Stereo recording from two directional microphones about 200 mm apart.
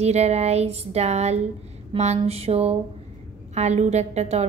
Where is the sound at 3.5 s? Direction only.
35° right (ahead or behind).